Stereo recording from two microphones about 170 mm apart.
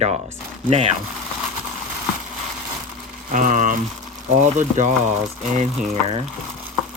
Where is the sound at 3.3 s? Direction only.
50° right (ahead or behind).